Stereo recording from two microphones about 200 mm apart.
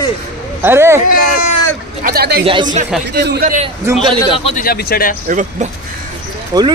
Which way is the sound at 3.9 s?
20° right (ahead or behind).